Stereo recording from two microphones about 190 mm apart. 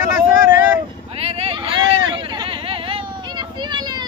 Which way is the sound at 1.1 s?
30° right (ahead or behind).